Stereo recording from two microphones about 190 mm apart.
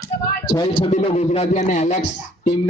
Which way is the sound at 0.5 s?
25° left (ahead or behind).